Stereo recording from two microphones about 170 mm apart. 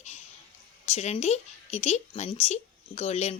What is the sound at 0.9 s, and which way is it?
Speech, 40° left (ahead or behind).